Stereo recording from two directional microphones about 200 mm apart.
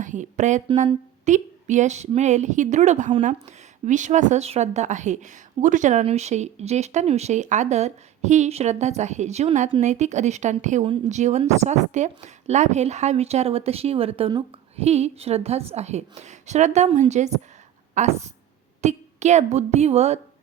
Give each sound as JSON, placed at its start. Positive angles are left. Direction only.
{"t": 0.0, "sound": "a woman's voice", "side_deg": -40}